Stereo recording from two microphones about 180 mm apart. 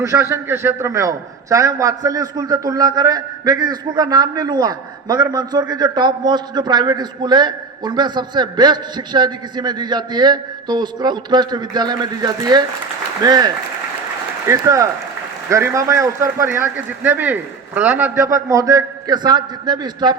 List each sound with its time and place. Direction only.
0.0 s a man's voice: 15° right (ahead or behind)